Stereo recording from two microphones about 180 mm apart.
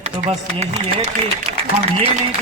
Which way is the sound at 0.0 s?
35° right (ahead or behind).